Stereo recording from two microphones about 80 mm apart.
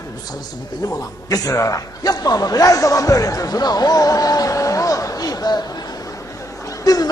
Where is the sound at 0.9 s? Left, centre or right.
Left.